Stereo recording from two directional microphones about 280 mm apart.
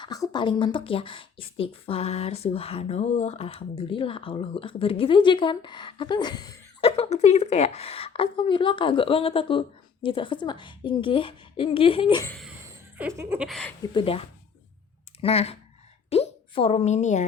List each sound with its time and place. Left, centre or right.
0.0 s speech: centre
13.0 s a sound: centre
13.8 s speech: centre